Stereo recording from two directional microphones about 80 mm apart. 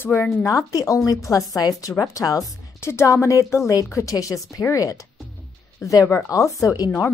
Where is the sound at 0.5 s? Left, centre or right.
Left.